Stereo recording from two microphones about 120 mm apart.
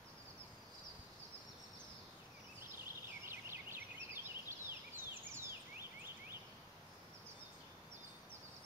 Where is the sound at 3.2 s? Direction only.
20° right (ahead or behind).